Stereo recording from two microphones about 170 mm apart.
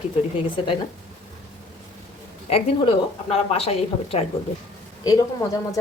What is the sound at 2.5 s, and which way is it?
A woman's voice, 35° left (ahead or behind).